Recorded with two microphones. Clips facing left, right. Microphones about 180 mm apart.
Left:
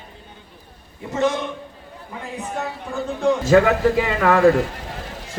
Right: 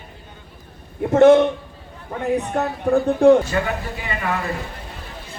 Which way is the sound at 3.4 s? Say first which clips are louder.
Left 9 dB; 90° left.